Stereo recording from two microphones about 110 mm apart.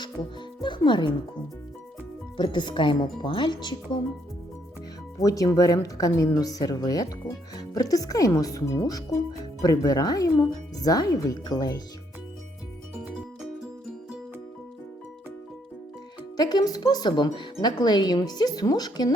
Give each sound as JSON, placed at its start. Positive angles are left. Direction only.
{"t": 0.9, "sound": "speech", "side_deg": 45}
{"t": 2.4, "sound": "speech", "side_deg": 45}
{"t": 5.1, "sound": "speech", "side_deg": 30}
{"t": 13.1, "sound": "music", "side_deg": -10}
{"t": 16.4, "sound": "speech", "side_deg": 35}